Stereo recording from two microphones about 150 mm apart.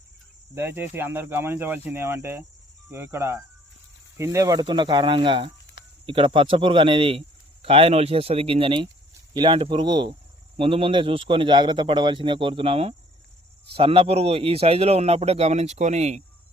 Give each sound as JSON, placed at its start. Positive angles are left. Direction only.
{"t": 0.5, "sound": "speech", "side_deg": -15}